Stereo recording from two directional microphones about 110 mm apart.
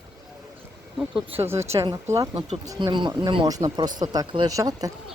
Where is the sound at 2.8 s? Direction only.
45° right (ahead or behind).